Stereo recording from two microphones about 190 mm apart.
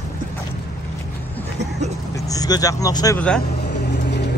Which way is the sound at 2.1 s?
20° left (ahead or behind).